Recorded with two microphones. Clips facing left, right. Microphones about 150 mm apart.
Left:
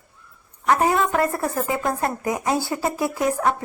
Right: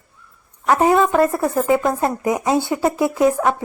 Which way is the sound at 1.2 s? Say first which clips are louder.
Right 6 dB; 20° right (ahead or behind).